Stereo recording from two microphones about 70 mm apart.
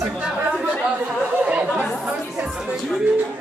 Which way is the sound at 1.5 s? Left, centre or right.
Centre.